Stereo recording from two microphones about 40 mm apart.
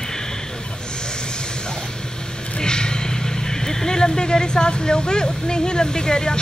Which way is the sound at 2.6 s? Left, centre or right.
Centre.